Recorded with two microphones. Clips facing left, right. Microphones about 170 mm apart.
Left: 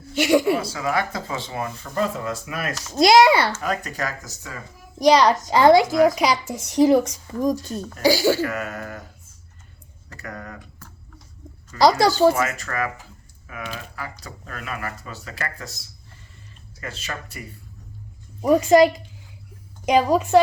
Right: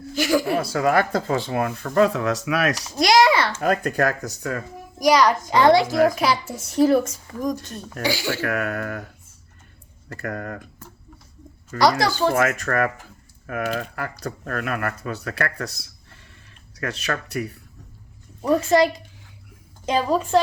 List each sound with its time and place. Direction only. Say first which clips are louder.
0.2 s a woman's voice: left 2 dB; 25° left (ahead or behind)
0.5 s speech: right 4 dB; 55° right (ahead or behind); by 2.7 s 80° right
2.9 s a woman's voice: left 3 dB; 25° left (ahead or behind)
3.6 s speech: right 6 dB; 50° right (ahead or behind)
4.9 s a woman's voice: left 2 dB; 30° left (ahead or behind); by 7.0 s 15° left (ahead or behind)
7.3 s a woman's voice: left 4 dB; 25° left (ahead or behind)
8.0 s speech: left 7 dB; 40° left (ahead or behind)
8.4 s speech: right 1 dB; 65° right (ahead or behind)
10.1 s speech: right 6 dB; 50° right (ahead or behind)
11.8 s a woman's voice: left 3 dB; 25° left (ahead or behind)
12.3 s speech: right 3 dB; 55° right (ahead or behind); by 17.5 s 70° right (ahead or behind)
18.4 s a woman's voice: left 3 dB; 20° left (ahead or behind)